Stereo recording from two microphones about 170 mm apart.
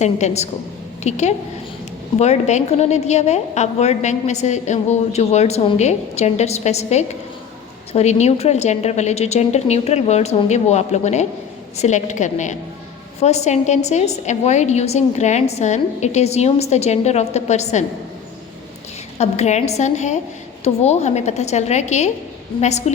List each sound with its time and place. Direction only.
0.0 s a woman's voice: 40° left (ahead or behind)
19.2 s a woman's voice: 40° left (ahead or behind)